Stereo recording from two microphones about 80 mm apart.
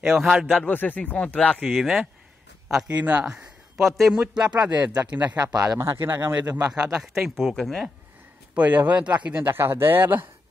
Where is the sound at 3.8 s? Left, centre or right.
Centre.